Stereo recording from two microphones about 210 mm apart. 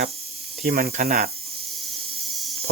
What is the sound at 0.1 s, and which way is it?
Hiss, 30° right (ahead or behind).